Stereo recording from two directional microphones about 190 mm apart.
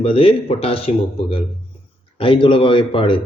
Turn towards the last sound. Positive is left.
turn(degrees=25)  # may be behind; listen again after turning